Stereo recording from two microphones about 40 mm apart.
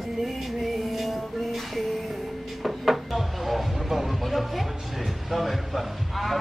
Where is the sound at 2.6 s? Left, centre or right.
Centre.